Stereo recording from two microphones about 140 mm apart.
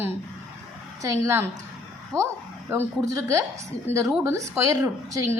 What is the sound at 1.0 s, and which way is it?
Speech, 20° right (ahead or behind).